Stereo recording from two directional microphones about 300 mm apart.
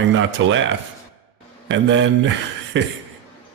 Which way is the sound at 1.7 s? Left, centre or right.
Right.